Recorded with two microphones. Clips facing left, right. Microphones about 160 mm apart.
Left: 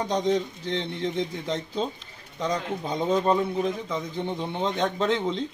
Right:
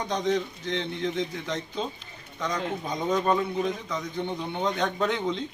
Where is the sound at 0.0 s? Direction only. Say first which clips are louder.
Left 2 dB; 30° left (ahead or behind).